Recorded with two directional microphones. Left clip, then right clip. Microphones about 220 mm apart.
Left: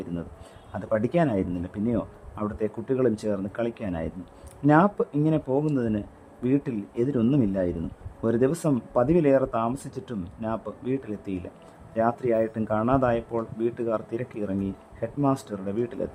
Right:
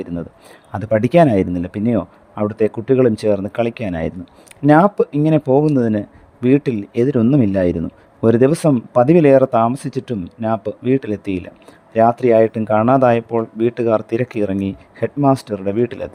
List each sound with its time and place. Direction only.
0.7 s speech: 35° right (ahead or behind)